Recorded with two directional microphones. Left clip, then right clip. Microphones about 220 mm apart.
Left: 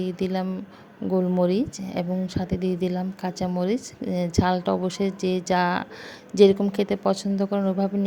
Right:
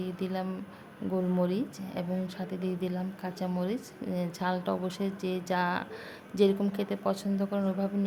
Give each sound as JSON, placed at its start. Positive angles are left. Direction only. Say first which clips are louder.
{"t": 0.0, "sound": "speech", "louder": "left 7 dB", "side_deg": 25}